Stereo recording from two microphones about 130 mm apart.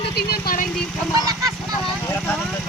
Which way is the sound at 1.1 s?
25° right (ahead or behind).